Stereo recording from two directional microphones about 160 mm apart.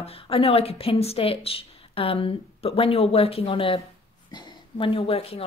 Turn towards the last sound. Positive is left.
turn(degrees=35)  # may be behind; listen again after turning